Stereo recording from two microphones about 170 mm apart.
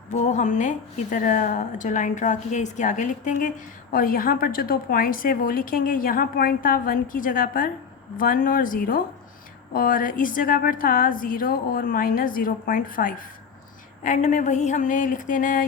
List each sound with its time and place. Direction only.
0.1 s a woman's voice: 45° left (ahead or behind)